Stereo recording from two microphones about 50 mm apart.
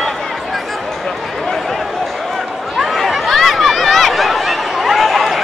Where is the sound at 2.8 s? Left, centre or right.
Centre.